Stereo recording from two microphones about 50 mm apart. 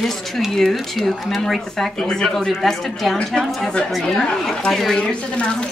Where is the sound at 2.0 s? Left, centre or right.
Centre.